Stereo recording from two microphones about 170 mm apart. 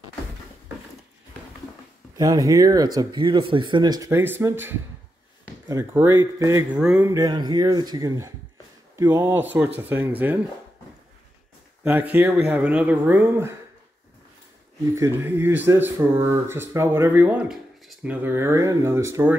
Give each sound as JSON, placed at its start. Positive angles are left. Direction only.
{"t": 2.1, "sound": "speech", "side_deg": -20}
{"t": 7.1, "sound": "speech", "side_deg": -20}
{"t": 11.8, "sound": "speech", "side_deg": -10}
{"t": 15.0, "sound": "speech", "side_deg": -15}